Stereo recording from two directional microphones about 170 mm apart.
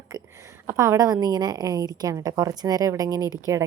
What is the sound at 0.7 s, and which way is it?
A woman's voice, 15° right (ahead or behind).